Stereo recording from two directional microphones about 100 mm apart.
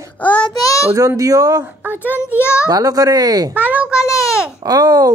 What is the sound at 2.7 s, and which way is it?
Speech, 35° right (ahead or behind).